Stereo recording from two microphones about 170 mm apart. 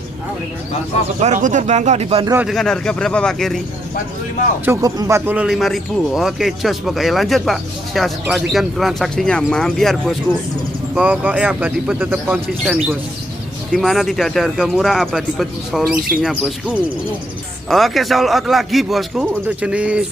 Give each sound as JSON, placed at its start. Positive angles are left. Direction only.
{"t": 1.2, "sound": "speech", "side_deg": -45}
{"t": 2.4, "sound": "speech", "side_deg": 5}
{"t": 4.6, "sound": "speech", "side_deg": -20}